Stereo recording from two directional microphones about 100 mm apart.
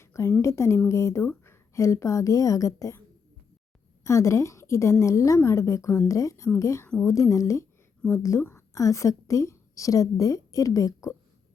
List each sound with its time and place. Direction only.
0.0 s a sound: 30° left (ahead or behind)
0.4 s a woman's voice: 30° left (ahead or behind)
4.0 s a woman's voice: 30° left (ahead or behind)